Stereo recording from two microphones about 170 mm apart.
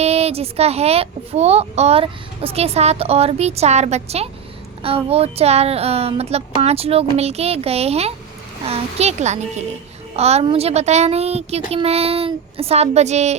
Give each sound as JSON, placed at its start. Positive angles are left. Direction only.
{"t": 0.0, "sound": "a child's voice", "side_deg": -35}